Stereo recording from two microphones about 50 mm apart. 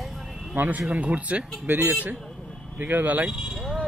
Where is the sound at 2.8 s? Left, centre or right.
Right.